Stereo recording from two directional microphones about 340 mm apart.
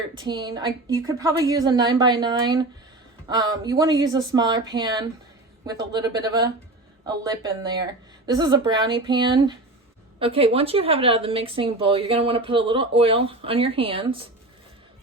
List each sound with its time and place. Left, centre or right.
0.1 s speech: centre